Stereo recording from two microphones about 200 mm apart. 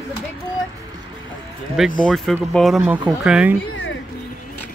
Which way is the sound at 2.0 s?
5° left (ahead or behind).